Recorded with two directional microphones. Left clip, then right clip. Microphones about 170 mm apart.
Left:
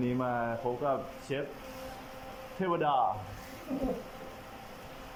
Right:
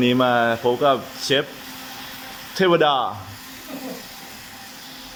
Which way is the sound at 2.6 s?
55° right (ahead or behind).